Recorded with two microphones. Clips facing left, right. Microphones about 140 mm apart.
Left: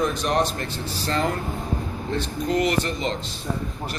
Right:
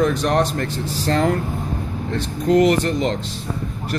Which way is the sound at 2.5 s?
70° right (ahead or behind).